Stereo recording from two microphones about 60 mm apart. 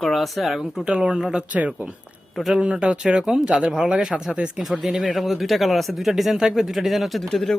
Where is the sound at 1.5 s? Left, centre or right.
Right.